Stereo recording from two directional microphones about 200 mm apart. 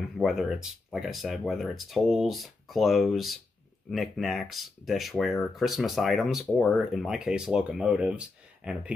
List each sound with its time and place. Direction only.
0.2 s speech: centre (ahead or behind)